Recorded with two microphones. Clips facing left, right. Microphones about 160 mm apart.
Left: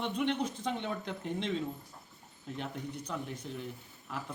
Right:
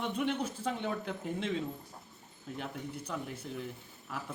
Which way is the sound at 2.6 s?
10° right (ahead or behind).